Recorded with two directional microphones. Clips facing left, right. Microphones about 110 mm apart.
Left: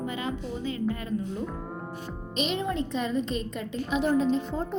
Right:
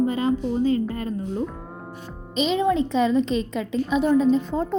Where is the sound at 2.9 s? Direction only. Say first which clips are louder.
Right 8 dB; 90° right.